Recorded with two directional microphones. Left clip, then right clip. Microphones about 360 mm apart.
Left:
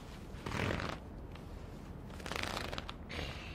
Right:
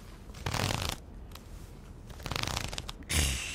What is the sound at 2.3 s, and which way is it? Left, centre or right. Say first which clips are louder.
Shuffling cards: right 4 dB; centre.